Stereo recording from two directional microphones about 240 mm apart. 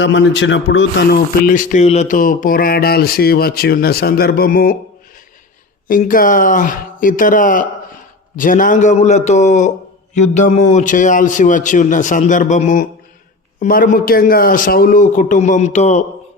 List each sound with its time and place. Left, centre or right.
0.0 s a man's voice: left
5.9 s a man's voice: left